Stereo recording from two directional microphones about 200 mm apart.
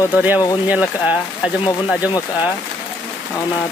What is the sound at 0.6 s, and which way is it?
Speech, 5° right (ahead or behind).